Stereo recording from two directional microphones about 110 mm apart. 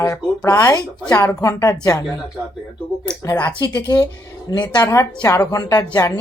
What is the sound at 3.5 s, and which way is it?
Speech, 40° left (ahead or behind).